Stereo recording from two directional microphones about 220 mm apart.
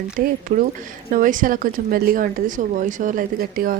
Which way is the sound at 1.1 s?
35° right (ahead or behind).